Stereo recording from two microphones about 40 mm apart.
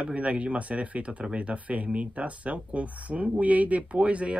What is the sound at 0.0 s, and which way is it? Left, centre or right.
Speech, right.